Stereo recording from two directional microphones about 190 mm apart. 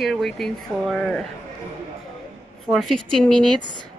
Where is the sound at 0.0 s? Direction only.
Centre (ahead or behind).